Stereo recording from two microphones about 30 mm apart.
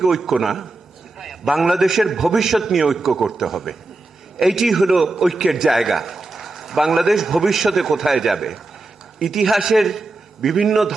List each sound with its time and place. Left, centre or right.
0.0 s a man's voice: centre